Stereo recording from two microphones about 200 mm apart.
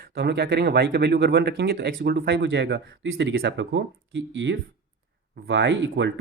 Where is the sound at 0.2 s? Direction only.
55° right (ahead or behind).